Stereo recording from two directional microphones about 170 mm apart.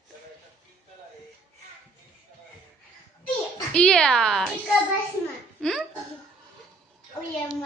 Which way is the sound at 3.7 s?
5° left (ahead or behind).